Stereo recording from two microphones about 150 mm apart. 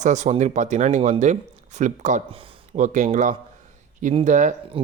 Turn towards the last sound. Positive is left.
turn(degrees=-55)  # may be behind; listen again after turning